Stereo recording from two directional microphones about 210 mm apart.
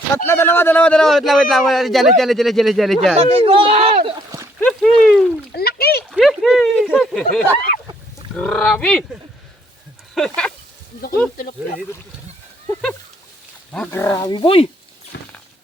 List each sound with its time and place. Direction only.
0.1 s speech: 10° left (ahead or behind)
3.2 s a child's voice: 25° right (ahead or behind)
4.6 s speech: 5° left (ahead or behind)
5.5 s a sound: 45° left (ahead or behind)
6.1 s speech: centre (ahead or behind)
10.2 s speech: 5° left (ahead or behind)
13.7 s speech: 10° left (ahead or behind); by 14.7 s 25° left (ahead or behind)
15.1 s a sound: 60° left (ahead or behind)